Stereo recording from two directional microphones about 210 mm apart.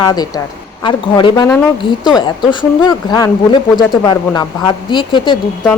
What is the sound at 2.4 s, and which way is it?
Speech, 20° left (ahead or behind).